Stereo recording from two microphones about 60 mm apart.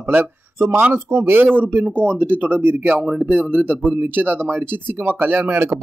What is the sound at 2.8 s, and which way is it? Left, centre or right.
Speech, centre.